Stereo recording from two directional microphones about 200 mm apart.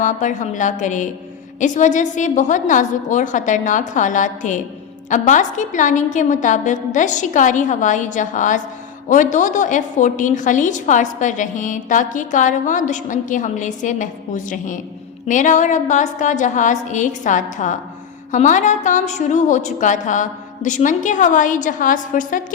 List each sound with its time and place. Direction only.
0.0 s a woman's voice: 40° left (ahead or behind)